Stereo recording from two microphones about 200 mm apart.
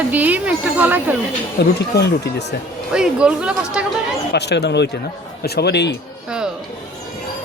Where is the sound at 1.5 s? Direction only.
55° left (ahead or behind).